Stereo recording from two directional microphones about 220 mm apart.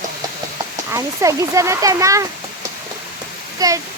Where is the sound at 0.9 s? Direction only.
15° right (ahead or behind).